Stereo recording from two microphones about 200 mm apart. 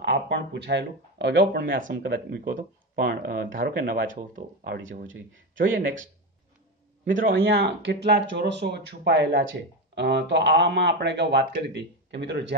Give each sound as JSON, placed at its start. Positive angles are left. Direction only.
{"t": 0.0, "sound": "speech", "side_deg": -60}
{"t": 7.3, "sound": "speech", "side_deg": -60}